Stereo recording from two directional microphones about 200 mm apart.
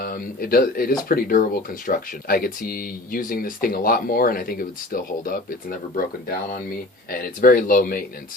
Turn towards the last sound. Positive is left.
turn(degrees=45)  # may be behind; listen again after turning